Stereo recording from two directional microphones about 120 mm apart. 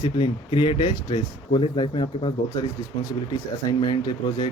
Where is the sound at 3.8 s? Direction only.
35° left (ahead or behind).